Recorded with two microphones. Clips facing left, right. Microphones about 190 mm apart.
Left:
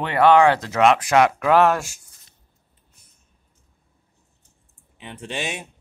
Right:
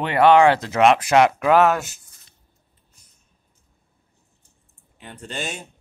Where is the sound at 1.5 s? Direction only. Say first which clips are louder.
Even; 5° right (ahead or behind).